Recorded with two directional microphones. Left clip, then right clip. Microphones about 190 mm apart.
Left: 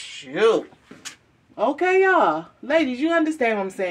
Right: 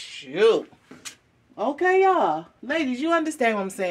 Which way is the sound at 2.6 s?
40° right (ahead or behind).